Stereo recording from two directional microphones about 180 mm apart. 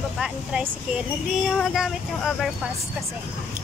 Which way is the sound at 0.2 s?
5° right (ahead or behind).